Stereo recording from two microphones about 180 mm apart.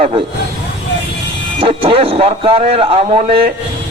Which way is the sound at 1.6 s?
30° right (ahead or behind).